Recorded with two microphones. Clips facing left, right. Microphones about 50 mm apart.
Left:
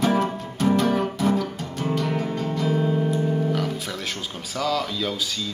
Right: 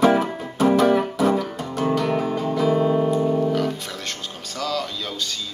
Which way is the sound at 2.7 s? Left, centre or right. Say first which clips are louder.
Right 4 dB; centre.